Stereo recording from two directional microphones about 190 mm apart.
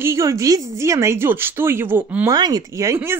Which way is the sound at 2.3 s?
20° right (ahead or behind).